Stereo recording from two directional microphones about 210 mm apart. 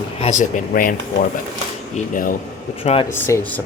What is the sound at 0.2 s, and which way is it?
Speech, 35° left (ahead or behind).